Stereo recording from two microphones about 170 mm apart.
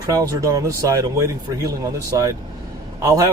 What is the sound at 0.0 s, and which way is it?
Speech, 20° right (ahead or behind).